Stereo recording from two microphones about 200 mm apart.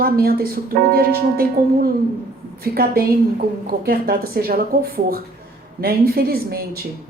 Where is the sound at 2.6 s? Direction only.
50° right (ahead or behind).